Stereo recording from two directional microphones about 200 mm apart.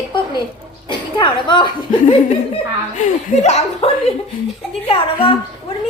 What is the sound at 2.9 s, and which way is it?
A woman's voice, 35° left (ahead or behind).